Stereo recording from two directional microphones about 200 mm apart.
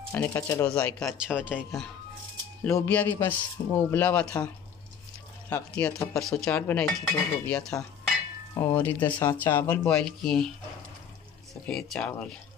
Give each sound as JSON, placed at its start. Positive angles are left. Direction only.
{"t": 0.1, "sound": "speech", "side_deg": 10}
{"t": 1.1, "sound": "speech", "side_deg": -5}
{"t": 2.6, "sound": "speech", "side_deg": 10}
{"t": 5.5, "sound": "speech", "side_deg": 10}
{"t": 11.6, "sound": "speech", "side_deg": 5}